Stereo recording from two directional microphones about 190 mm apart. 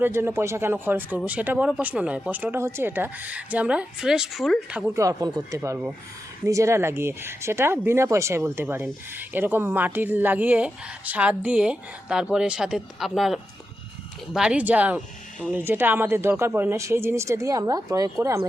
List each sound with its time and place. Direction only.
0.0 s speech: 10° right (ahead or behind)
4.9 s speech: 15° right (ahead or behind)